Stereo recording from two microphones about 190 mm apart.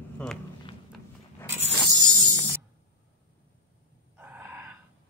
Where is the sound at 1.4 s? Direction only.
15° right (ahead or behind).